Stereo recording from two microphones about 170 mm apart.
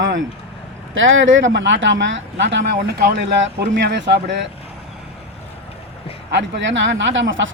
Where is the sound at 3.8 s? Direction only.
90° right.